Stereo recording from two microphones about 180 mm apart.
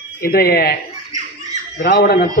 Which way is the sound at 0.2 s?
55° left (ahead or behind).